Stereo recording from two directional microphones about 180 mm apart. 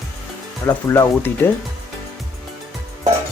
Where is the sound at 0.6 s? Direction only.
15° left (ahead or behind).